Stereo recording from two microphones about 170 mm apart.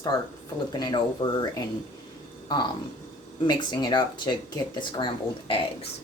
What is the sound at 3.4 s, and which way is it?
Speech, 25° left (ahead or behind).